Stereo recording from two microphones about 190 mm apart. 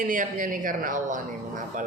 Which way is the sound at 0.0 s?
45° right (ahead or behind).